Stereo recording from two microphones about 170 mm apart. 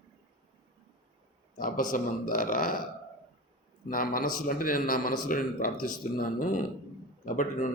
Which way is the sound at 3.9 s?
55° left (ahead or behind).